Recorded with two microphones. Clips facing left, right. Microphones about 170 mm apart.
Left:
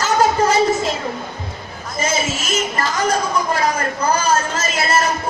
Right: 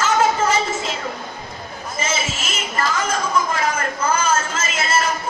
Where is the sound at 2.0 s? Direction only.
40° left (ahead or behind).